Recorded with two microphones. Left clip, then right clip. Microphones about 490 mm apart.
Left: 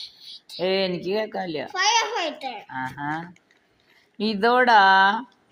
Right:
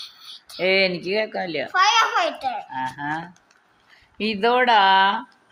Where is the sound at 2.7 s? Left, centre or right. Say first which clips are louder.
Right 2 dB; left.